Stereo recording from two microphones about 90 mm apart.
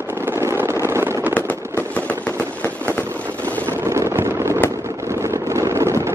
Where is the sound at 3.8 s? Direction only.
30° right (ahead or behind).